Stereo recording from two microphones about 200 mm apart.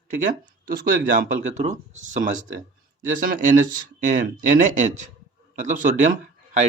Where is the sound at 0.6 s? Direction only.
45° right (ahead or behind).